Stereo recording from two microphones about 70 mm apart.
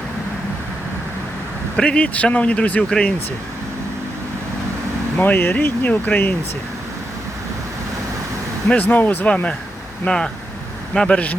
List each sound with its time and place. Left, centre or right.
1.7 s speech: centre
5.1 s speech: left
8.7 s speech: left